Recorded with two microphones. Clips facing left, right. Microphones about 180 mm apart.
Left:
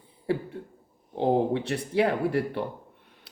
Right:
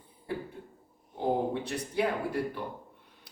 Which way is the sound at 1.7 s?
70° left (ahead or behind).